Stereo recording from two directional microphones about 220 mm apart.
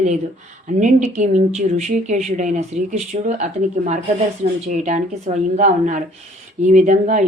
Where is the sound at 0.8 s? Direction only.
35° right (ahead or behind).